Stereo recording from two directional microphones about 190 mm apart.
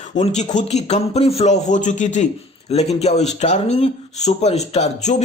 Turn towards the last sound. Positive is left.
turn(degrees=35)  # may be behind; listen again after turning